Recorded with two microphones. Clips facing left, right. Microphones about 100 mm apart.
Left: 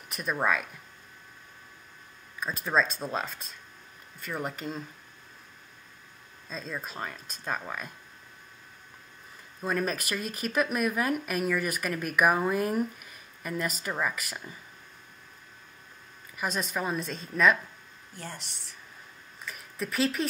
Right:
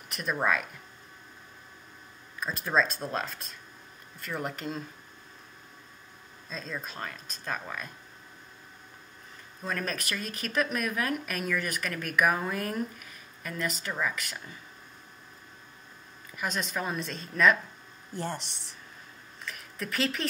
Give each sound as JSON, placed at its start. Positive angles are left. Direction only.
{"t": 0.1, "sound": "speech", "side_deg": 0}
{"t": 2.4, "sound": "speech", "side_deg": 0}
{"t": 6.5, "sound": "speech", "side_deg": 5}
{"t": 9.6, "sound": "speech", "side_deg": 10}
{"t": 16.3, "sound": "speech", "side_deg": 5}
{"t": 18.1, "sound": "speech", "side_deg": -30}
{"t": 19.4, "sound": "a sound", "side_deg": 0}